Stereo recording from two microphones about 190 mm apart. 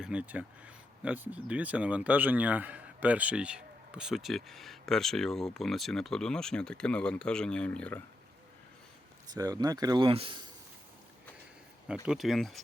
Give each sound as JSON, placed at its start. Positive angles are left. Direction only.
{"t": 0.0, "sound": "speech", "side_deg": -5}
{"t": 9.3, "sound": "speech", "side_deg": -20}
{"t": 12.0, "sound": "speech", "side_deg": 0}